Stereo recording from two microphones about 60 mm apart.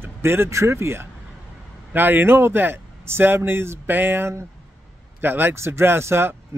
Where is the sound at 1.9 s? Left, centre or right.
Right.